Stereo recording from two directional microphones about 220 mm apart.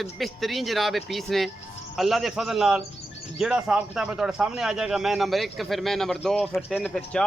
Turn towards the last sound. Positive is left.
turn(degrees=5)  # may be behind; listen again after turning